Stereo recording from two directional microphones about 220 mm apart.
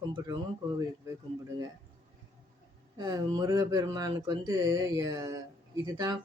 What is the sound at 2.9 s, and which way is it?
Speech, 15° right (ahead or behind).